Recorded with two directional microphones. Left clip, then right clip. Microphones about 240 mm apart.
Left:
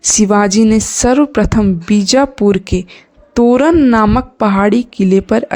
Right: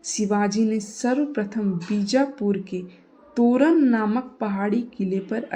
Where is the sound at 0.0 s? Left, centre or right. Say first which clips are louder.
Left 13 dB; left.